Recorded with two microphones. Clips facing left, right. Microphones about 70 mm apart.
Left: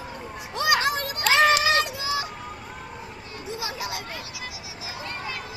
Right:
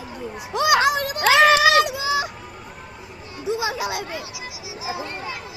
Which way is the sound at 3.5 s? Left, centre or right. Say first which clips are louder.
Right 8 dB; right.